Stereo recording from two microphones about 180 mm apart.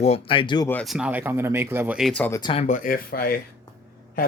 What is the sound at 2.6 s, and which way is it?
Speech, 45° left (ahead or behind).